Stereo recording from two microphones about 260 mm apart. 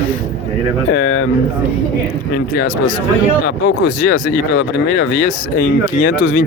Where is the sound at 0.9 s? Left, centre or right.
Left.